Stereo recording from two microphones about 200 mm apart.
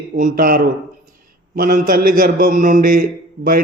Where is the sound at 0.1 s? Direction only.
40° right (ahead or behind).